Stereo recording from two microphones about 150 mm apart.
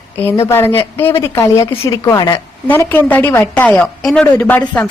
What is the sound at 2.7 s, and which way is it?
A woman's voice, 15° left (ahead or behind).